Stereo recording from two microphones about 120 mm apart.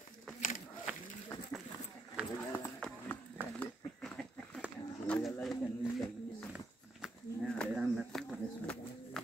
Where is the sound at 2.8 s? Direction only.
5° left (ahead or behind).